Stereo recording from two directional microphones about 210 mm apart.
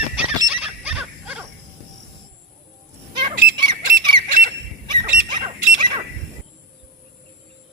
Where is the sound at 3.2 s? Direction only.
20° right (ahead or behind).